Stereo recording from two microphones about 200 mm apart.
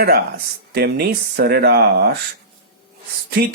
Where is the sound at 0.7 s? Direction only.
50° right (ahead or behind).